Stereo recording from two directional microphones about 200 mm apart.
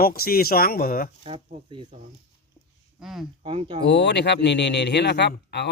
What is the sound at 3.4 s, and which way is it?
Speech, 25° right (ahead or behind).